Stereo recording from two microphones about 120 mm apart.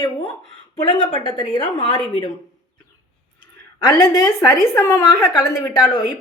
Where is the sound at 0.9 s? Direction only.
45° right (ahead or behind).